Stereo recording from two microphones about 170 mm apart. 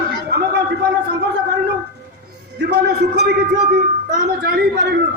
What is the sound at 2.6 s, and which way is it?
Speech, 75° right (ahead or behind).